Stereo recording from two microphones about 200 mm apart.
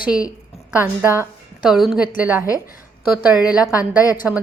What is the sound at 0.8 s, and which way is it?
A woman's voice, 10° right (ahead or behind).